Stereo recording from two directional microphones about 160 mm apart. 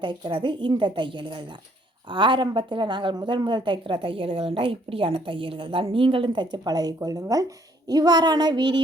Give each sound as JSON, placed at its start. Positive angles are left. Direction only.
{"t": 0.0, "sound": "a woman's voice", "side_deg": -30}